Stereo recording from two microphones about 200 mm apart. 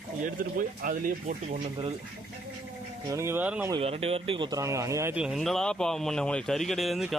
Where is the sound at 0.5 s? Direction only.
45° right (ahead or behind).